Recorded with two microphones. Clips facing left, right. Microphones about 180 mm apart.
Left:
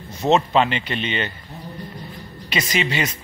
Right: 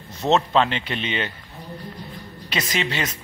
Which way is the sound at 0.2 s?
5° left (ahead or behind).